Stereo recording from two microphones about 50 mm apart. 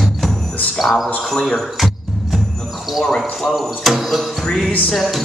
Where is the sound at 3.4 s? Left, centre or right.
Centre.